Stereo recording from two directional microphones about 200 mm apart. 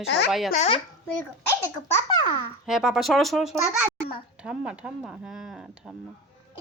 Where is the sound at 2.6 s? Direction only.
Centre (ahead or behind).